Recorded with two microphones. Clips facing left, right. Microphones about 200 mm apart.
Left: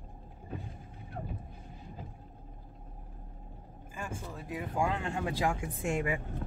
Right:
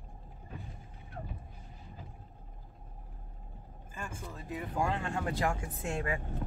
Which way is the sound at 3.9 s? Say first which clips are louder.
Left 2 dB; 10° left (ahead or behind).